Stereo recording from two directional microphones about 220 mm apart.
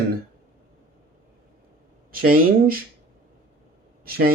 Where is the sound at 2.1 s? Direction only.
40° right (ahead or behind).